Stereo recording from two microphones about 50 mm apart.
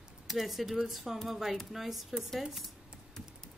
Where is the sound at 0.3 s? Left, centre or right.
Centre.